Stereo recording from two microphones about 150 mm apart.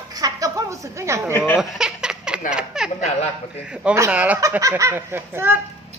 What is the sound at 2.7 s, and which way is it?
A woman's voice, 5° right (ahead or behind).